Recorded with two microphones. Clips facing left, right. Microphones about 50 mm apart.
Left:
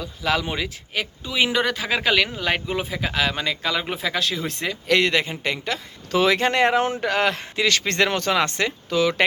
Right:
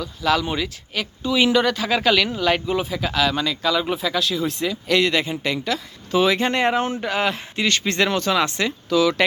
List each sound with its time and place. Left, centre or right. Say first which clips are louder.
0.0 s speech: right 3 dB; left
6.1 s speech: even; left